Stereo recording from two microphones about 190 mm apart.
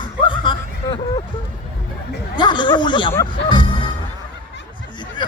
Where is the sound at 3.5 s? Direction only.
25° left (ahead or behind).